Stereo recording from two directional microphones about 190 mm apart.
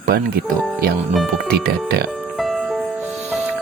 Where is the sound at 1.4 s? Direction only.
55° right (ahead or behind).